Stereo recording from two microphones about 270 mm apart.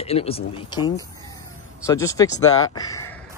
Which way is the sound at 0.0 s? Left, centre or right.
Left.